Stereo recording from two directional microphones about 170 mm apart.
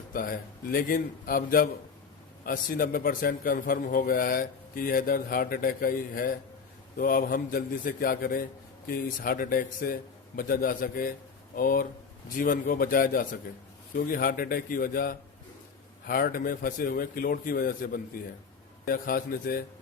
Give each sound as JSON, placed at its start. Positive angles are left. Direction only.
{"t": 0.1, "sound": "a man's voice", "side_deg": 55}